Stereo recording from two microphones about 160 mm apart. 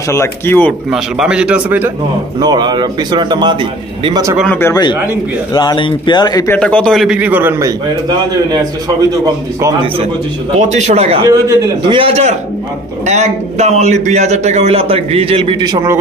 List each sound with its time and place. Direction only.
0.1 s speech: 15° left (ahead or behind)
0.9 s a man's voice: 5° right (ahead or behind)
2.4 s a man's voice: 25° right (ahead or behind)
4.5 s speech: 15° left (ahead or behind)
5.5 s a man's voice: 25° left (ahead or behind)
6.6 s a man's voice: 5° left (ahead or behind); by 9.8 s 20° right (ahead or behind)
10.6 s speech: 45° right (ahead or behind)
11.2 s a man's voice: 20° right (ahead or behind)
12.0 s speech: 40° right (ahead or behind); by 16.0 s 25° right (ahead or behind)